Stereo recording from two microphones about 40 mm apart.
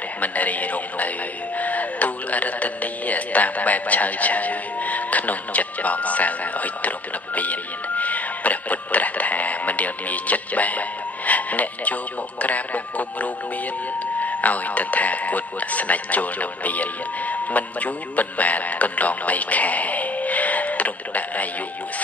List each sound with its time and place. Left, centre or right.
0.2 s speech: left